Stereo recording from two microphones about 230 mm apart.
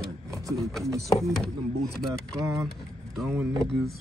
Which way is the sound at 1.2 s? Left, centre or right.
Centre.